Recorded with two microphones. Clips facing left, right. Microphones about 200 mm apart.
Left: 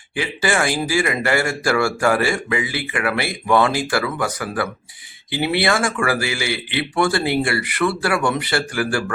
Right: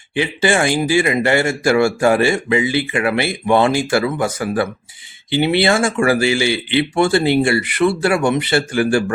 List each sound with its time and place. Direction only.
0.1 s speech: 25° right (ahead or behind)